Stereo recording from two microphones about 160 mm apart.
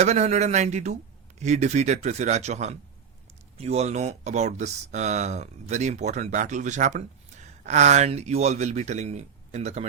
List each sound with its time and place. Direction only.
0.0 s speech: 45° right (ahead or behind)